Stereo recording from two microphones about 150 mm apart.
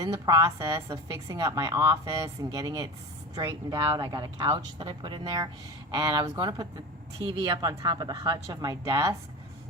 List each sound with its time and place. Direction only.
0.0 s a woman's voice: 25° right (ahead or behind)